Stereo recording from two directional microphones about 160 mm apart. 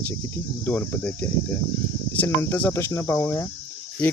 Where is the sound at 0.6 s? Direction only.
10° left (ahead or behind).